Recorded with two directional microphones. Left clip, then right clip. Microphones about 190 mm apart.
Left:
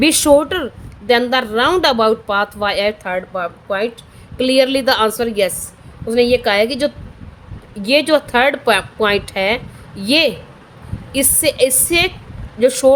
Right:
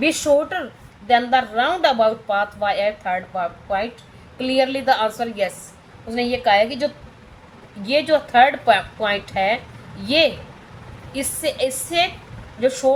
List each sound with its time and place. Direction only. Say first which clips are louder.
0.0 s a woman's voice: left 6 dB; 65° left (ahead or behind)